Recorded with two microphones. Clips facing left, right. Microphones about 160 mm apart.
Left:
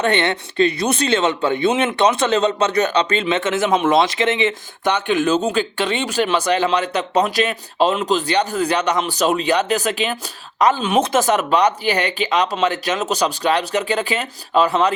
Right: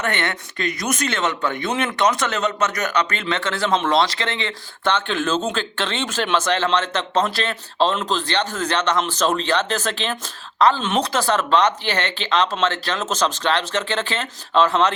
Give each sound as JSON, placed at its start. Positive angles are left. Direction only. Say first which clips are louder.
{"t": 0.0, "sound": "speech", "louder": "left 6 dB", "side_deg": 25}